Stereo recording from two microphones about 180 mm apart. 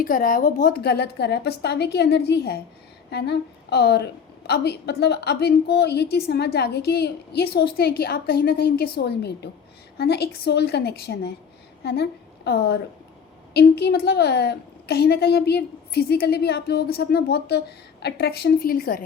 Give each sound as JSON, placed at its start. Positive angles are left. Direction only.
{"t": 0.0, "sound": "a woman's voice", "side_deg": 50}